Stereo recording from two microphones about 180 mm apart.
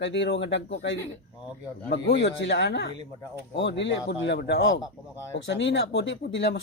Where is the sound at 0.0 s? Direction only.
85° left.